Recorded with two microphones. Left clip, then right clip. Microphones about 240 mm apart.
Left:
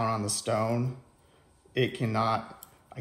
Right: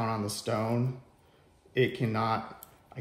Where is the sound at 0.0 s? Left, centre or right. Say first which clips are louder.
Left 3 dB; left.